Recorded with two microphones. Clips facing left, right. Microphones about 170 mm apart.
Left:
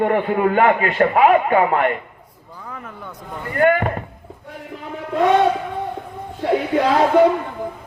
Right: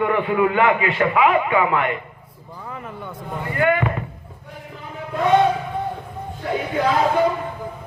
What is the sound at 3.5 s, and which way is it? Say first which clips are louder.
Speech: left 3 dB; 45° left (ahead or behind).